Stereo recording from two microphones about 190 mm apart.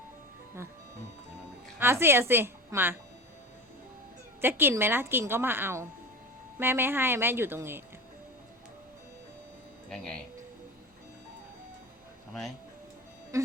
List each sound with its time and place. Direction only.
1.8 s a woman's voice: 10° right (ahead or behind)
4.4 s a woman's voice: 10° right (ahead or behind)
9.9 s speech: 5° left (ahead or behind)
13.3 s music: 15° right (ahead or behind)